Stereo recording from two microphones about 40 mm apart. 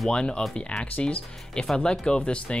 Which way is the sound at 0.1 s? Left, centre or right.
Left.